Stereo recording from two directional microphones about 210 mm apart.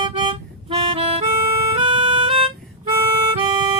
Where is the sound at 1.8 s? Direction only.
25° right (ahead or behind).